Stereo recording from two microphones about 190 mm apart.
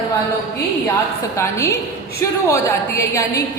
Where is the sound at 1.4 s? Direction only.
15° left (ahead or behind).